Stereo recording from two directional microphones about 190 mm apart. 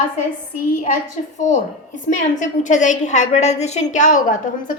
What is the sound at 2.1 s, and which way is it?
A woman's voice, 40° left (ahead or behind).